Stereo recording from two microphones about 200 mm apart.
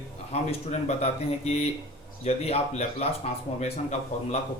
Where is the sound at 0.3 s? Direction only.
35° left (ahead or behind).